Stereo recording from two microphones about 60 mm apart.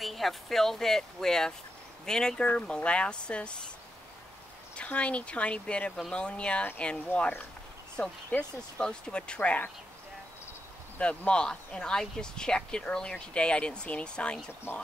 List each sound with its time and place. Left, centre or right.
0.0 s speech: centre
4.7 s speech: left
11.0 s speech: centre